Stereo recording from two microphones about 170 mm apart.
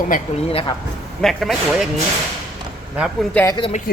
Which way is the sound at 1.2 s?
Centre (ahead or behind).